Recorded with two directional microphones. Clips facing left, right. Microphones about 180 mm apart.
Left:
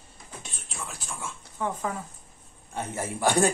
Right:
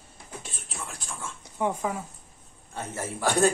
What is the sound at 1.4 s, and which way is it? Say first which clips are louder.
Speech: right 3 dB; 15° right (ahead or behind).